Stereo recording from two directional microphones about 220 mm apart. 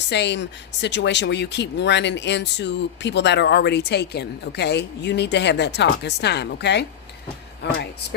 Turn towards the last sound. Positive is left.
turn(degrees=55)  # may be behind; listen again after turning